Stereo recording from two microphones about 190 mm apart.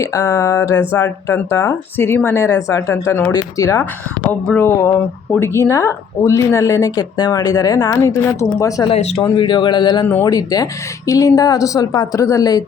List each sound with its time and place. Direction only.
0.0 s speech: 20° left (ahead or behind)
8.9 s speech: 35° left (ahead or behind)